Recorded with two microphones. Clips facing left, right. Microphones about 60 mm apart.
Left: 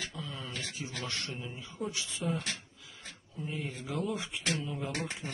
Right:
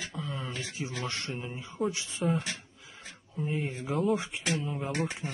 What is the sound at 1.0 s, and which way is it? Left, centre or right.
Speech, right.